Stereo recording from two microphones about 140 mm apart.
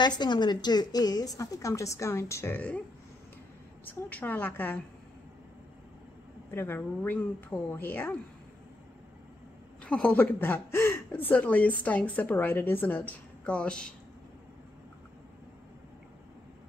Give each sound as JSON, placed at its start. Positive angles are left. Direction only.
{"t": 0.0, "sound": "a woman's voice", "side_deg": 30}
{"t": 3.8, "sound": "a woman's voice", "side_deg": 10}
{"t": 6.5, "sound": "a woman's voice", "side_deg": 15}
{"t": 9.8, "sound": "a woman's voice", "side_deg": 10}